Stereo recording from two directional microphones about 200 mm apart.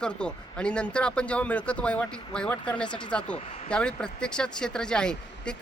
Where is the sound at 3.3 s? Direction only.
35° left (ahead or behind).